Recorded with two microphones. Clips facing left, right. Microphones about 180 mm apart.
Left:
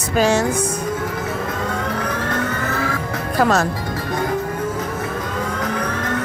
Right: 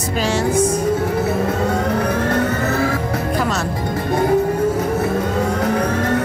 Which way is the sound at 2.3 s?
30° right (ahead or behind).